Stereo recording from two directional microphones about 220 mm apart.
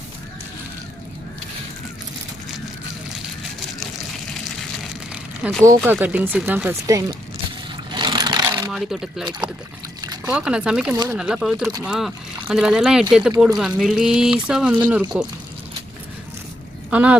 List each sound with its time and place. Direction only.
5.4 s speech: centre (ahead or behind); by 7.2 s 15° right (ahead or behind)
7.9 s vehicle: 20° right (ahead or behind)
8.7 s speech: centre (ahead or behind)
10.2 s speech: 5° right (ahead or behind)
10.9 s speech: 15° right (ahead or behind)
11.2 s speech: centre (ahead or behind)
16.9 s speech: 5° right (ahead or behind)